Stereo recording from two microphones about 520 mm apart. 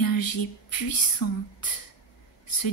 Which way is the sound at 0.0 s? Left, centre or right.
Left.